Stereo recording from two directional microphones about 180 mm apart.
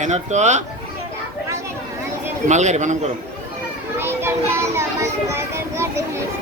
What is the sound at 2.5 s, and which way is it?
Speech, 40° right (ahead or behind).